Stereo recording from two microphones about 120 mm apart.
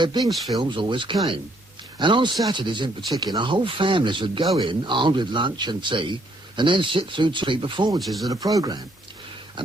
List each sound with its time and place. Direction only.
0.0 s speech: 35° right (ahead or behind)
7.9 s speech: centre (ahead or behind)
8.3 s speech: 30° right (ahead or behind)
9.6 s speech: 40° right (ahead or behind)